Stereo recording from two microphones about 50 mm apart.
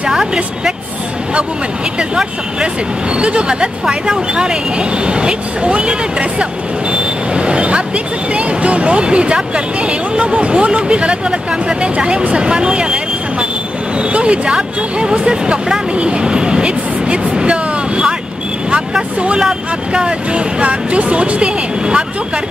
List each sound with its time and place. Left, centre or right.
0.1 s speech: centre
2.0 s speech: centre
6.9 s vehicle: centre
8.4 s speech: right
19.9 s speech: centre